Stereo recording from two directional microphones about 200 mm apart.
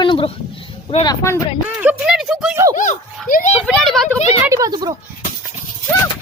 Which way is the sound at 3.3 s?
40° left (ahead or behind).